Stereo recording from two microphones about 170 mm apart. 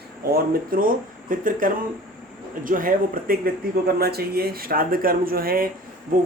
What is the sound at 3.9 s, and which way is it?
Speech, 65° right (ahead or behind).